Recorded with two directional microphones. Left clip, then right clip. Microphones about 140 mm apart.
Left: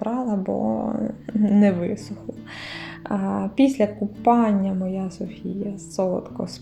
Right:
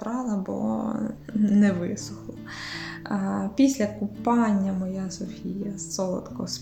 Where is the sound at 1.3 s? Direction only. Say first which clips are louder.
Left 4 dB; 10° left (ahead or behind).